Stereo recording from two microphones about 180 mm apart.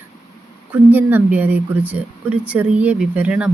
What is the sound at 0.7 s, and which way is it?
Speech, 10° right (ahead or behind).